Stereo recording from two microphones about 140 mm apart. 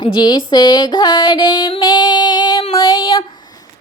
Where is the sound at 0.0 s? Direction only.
30° left (ahead or behind).